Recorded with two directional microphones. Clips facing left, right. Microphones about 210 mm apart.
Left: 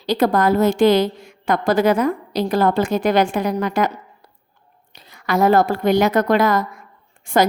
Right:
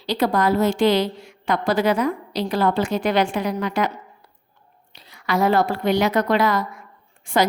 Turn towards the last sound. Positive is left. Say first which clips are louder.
# left 3 dB
turn(degrees=45)  # may be behind; listen again after turning